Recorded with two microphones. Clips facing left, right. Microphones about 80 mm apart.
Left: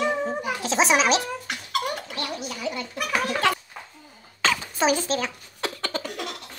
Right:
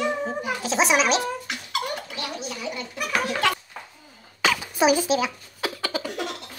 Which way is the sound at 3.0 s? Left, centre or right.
Centre.